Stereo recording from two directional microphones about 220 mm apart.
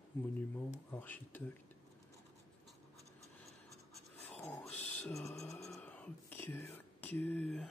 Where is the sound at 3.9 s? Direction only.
5° left (ahead or behind).